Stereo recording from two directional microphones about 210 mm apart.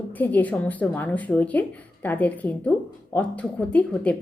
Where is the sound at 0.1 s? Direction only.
10° left (ahead or behind).